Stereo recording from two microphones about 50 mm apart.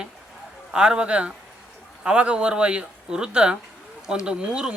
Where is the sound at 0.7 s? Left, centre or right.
Centre.